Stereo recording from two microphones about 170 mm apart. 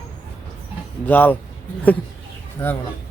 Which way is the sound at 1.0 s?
10° left (ahead or behind).